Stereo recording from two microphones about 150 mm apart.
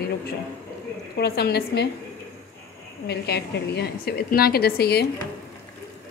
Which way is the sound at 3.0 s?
90° left.